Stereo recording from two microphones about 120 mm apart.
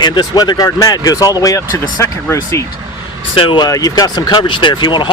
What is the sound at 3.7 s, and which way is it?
Speech, 30° left (ahead or behind).